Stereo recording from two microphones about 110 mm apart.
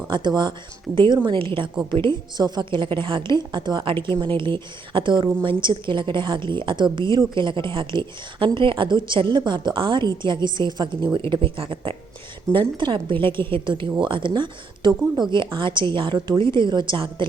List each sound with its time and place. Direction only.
0.1 s a woman's voice: 45° right (ahead or behind)